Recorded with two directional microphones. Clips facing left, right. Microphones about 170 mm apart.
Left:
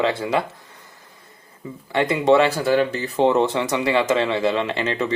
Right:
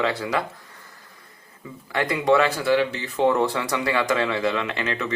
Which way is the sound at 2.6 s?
45° left (ahead or behind).